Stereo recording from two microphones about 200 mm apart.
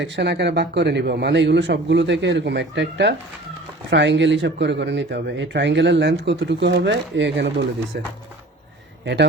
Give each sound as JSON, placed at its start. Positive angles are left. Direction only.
{"t": 0.0, "sound": "speech", "side_deg": -60}